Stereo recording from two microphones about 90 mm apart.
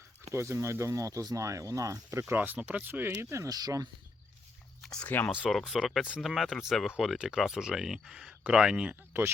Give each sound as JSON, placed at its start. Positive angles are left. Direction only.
{"t": 0.3, "sound": "speech", "side_deg": -35}
{"t": 2.3, "sound": "speech", "side_deg": -20}
{"t": 3.5, "sound": "speech", "side_deg": -45}
{"t": 4.8, "sound": "speech", "side_deg": 5}
{"t": 5.0, "sound": "speech", "side_deg": 20}
{"t": 5.5, "sound": "speech", "side_deg": 0}